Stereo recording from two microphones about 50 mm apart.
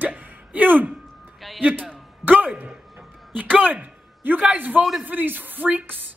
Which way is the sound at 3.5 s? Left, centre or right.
Right.